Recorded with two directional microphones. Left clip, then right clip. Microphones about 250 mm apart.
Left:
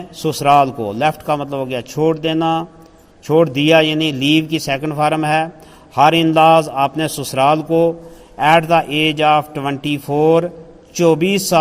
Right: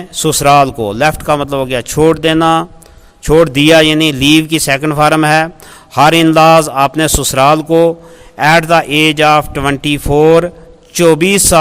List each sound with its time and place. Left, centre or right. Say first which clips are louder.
0.1 s a man's voice: right 4 dB; right